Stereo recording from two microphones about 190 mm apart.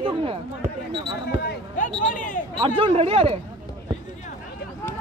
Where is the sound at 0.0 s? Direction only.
30° right (ahead or behind).